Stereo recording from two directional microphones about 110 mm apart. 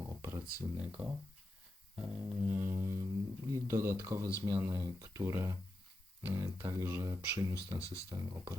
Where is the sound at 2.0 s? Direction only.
15° right (ahead or behind).